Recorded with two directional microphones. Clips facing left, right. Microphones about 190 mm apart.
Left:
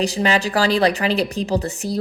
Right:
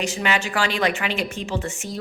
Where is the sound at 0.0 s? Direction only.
35° left (ahead or behind).